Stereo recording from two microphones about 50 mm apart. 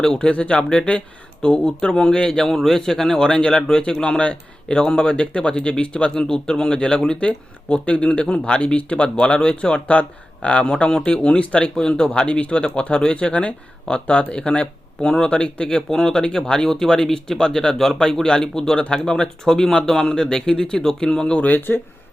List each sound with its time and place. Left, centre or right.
0.0 s speech: centre
0.3 s speech: left
21.3 s speech: left